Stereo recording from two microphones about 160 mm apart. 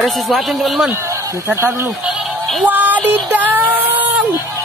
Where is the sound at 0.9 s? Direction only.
15° right (ahead or behind).